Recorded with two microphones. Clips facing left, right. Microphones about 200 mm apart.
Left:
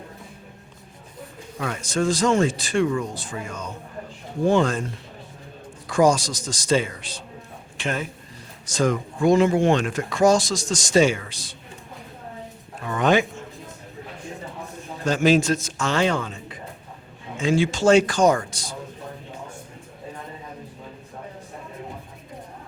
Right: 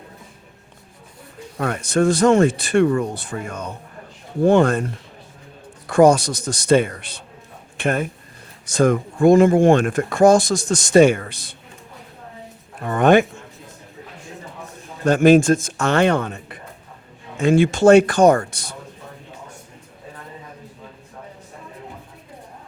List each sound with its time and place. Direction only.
1.5 s speech: 55° right (ahead or behind)
5.9 s speech: 60° right (ahead or behind)
12.8 s speech: 55° right (ahead or behind)
15.0 s speech: 55° right (ahead or behind)